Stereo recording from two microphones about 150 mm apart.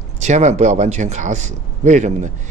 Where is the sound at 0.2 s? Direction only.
50° right (ahead or behind).